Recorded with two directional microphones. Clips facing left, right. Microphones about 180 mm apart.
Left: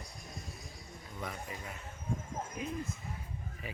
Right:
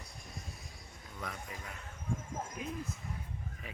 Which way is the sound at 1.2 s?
Centre (ahead or behind).